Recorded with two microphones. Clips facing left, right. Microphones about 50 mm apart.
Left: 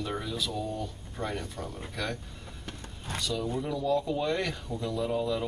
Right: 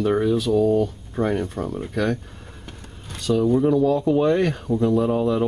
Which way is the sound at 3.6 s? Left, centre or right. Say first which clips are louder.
Right 10 dB; right.